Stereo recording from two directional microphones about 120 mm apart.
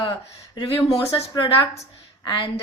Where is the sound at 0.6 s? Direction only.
30° left (ahead or behind).